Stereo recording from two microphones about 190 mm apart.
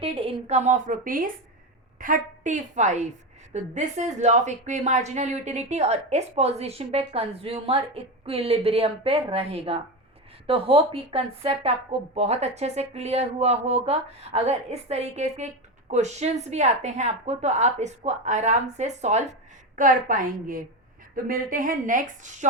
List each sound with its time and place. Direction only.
0.0 s a woman's voice: 30° right (ahead or behind)